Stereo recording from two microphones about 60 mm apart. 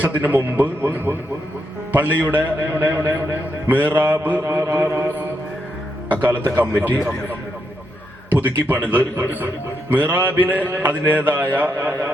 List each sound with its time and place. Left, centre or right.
0.0 s mantra: right
4.4 s a sound: right
6.1 s mantra: right
8.4 s mantra: right